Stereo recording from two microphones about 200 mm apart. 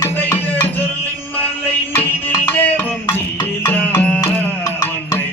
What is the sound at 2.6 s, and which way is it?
Music, 10° left (ahead or behind).